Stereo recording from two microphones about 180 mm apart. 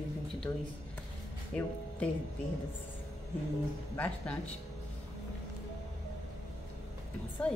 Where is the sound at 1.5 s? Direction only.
5° left (ahead or behind).